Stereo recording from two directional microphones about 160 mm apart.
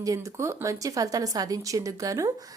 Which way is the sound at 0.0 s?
20° right (ahead or behind).